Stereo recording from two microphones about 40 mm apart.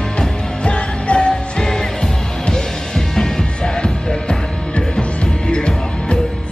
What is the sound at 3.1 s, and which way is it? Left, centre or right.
Music, centre.